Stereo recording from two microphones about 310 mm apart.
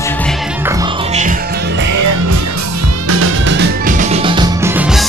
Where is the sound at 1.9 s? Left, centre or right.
Right.